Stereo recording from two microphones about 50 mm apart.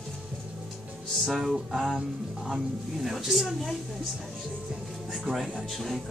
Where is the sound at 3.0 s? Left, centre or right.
Centre.